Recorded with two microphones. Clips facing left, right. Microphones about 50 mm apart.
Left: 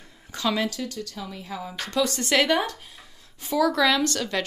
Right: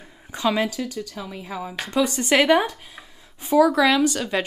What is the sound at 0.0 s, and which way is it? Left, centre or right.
Speech, centre.